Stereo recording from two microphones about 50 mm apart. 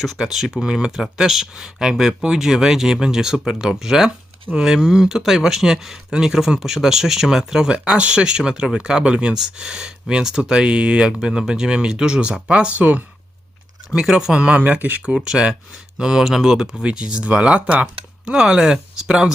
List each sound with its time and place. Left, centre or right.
0.0 s speech: centre
0.9 s speech: centre; by 13.0 s right
13.9 s speech: centre
14.3 s speech: right
14.6 s speech: right
15.1 s speech: centre